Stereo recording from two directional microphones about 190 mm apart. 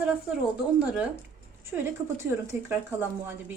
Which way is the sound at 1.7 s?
5° right (ahead or behind).